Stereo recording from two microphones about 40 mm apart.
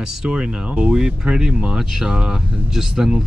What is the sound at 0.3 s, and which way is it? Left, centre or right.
Speech, right.